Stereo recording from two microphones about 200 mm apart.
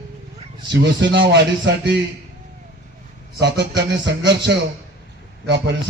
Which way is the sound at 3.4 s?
60° right (ahead or behind).